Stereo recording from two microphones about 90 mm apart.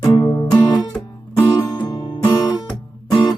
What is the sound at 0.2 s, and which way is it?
Music, 65° left (ahead or behind).